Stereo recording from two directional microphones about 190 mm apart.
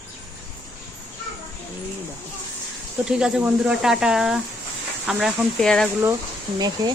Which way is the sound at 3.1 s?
5° right (ahead or behind).